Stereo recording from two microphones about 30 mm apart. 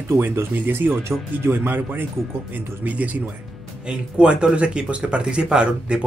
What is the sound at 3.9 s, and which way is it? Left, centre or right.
Speech, right.